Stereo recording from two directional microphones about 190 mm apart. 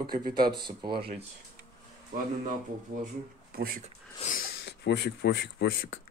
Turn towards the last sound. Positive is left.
turn(degrees=60)  # may be behind; listen again after turning